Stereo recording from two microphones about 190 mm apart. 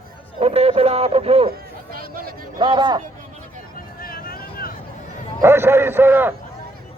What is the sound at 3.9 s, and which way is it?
Vehicle, 50° left (ahead or behind).